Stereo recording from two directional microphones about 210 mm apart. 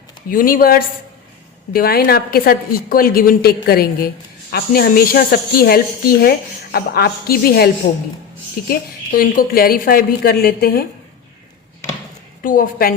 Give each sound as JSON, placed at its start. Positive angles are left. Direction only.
{"t": 0.3, "sound": "a woman's voice", "side_deg": 40}
{"t": 8.7, "sound": "a woman's voice", "side_deg": 45}
{"t": 12.4, "sound": "a woman's voice", "side_deg": 40}